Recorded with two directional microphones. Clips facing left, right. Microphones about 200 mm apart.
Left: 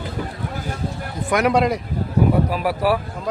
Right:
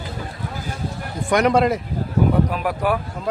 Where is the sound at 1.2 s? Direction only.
5° left (ahead or behind).